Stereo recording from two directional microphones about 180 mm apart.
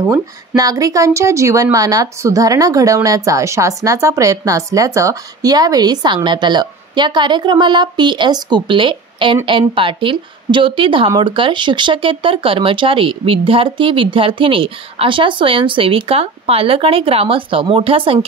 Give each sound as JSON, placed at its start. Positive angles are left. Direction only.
{"t": 0.0, "sound": "speech", "side_deg": -20}